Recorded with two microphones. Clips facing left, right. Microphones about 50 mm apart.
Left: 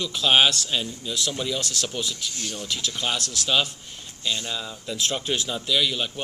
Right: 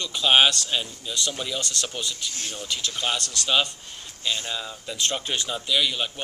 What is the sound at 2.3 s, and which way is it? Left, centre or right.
Speech, right.